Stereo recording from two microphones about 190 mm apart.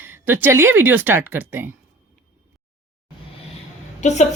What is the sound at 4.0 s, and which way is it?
Speech, 35° left (ahead or behind).